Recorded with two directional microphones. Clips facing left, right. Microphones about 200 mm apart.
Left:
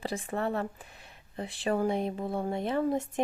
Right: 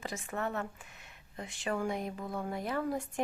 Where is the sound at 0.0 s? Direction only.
30° left (ahead or behind).